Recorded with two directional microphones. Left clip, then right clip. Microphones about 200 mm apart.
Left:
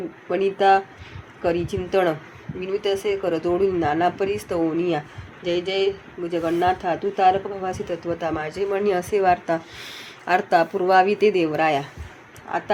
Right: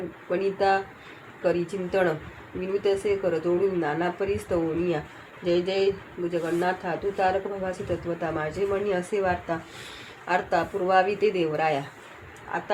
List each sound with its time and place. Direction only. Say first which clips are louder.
0.3 s speech: left 6 dB; 50° left (ahead or behind)